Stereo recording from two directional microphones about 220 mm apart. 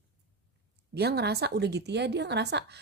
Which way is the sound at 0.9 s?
45° right (ahead or behind).